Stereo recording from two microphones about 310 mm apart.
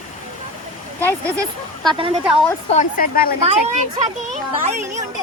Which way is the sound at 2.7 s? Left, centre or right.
Left.